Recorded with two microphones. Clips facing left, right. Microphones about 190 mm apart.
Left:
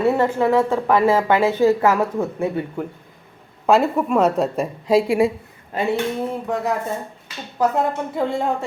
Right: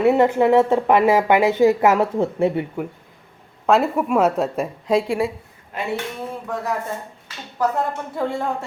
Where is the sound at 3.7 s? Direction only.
5° right (ahead or behind).